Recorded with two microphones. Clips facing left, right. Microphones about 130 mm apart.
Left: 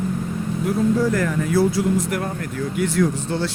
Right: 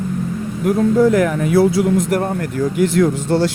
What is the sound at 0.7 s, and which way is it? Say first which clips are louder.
Speech: right 6 dB; 55° right (ahead or behind).